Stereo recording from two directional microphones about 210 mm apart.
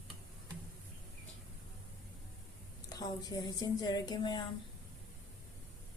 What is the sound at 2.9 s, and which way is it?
A woman's voice, 15° left (ahead or behind).